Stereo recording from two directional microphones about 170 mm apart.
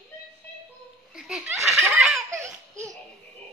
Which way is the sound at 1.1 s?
5° right (ahead or behind).